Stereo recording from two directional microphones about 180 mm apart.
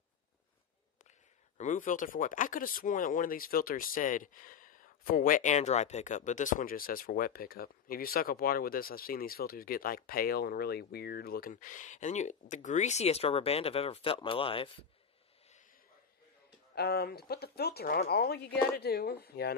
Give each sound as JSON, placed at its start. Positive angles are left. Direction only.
{"t": 1.6, "sound": "speech", "side_deg": 45}
{"t": 16.7, "sound": "speech", "side_deg": 65}